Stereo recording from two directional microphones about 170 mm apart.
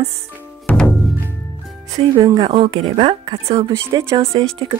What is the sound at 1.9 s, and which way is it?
Speech, 40° right (ahead or behind).